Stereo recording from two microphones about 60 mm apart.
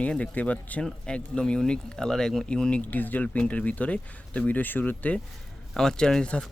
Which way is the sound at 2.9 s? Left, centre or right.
Left.